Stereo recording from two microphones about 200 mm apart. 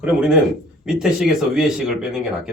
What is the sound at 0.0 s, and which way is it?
Speech, 5° right (ahead or behind).